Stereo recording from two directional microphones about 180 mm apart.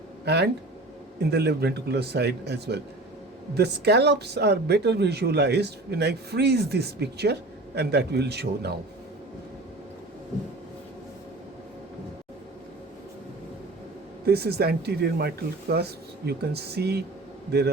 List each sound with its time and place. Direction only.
0.3 s speech: 70° right (ahead or behind)
14.3 s speech: 60° right (ahead or behind)